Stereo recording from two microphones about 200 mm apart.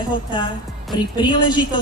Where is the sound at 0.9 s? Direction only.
20° left (ahead or behind).